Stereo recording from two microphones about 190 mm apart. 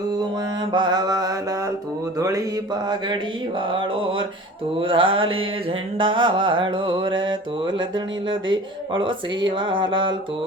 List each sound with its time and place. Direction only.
0.7 s mantra: 25° right (ahead or behind)
2.1 s speech: 20° right (ahead or behind)
3.6 s mantra: 25° right (ahead or behind)